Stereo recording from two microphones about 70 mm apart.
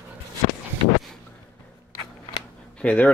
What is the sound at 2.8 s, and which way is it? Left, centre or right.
Speech, centre.